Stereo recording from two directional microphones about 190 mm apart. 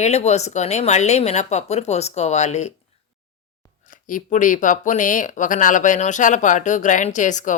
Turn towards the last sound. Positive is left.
turn(degrees=40)  # may be behind; listen again after turning